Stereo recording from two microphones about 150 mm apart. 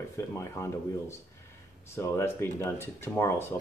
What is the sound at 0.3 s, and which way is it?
Speech, 20° left (ahead or behind).